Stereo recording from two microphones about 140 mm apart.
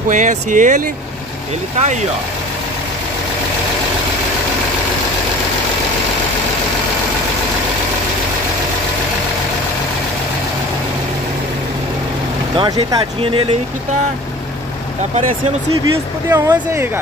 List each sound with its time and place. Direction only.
0.1 s speech: 65° right (ahead or behind)
12.5 s speech: 25° right (ahead or behind)
13.2 s speech: 40° right (ahead or behind)
15.8 s speech: 25° right (ahead or behind)